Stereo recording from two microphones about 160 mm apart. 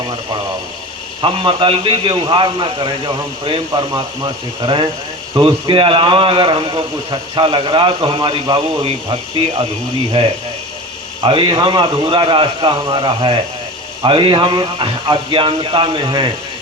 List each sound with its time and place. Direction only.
1.2 s a man's voice: 30° right (ahead or behind)